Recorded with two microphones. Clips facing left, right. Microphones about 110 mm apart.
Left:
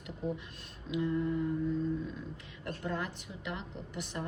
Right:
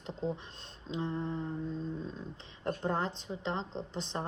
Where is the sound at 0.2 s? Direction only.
25° right (ahead or behind).